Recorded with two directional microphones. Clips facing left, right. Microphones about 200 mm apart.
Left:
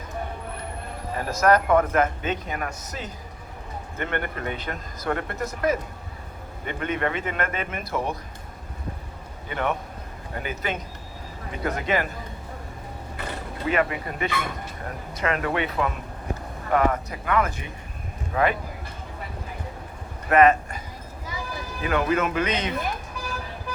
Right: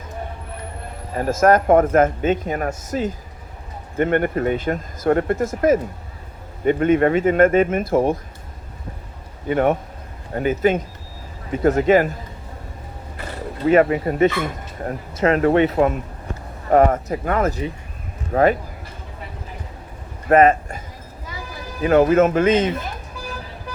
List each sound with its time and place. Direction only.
1.1 s speech: 45° right (ahead or behind)
9.5 s speech: 45° right (ahead or behind)
13.7 s speech: 40° right (ahead or behind)
20.3 s speech: 30° right (ahead or behind)
21.8 s speech: 45° right (ahead or behind)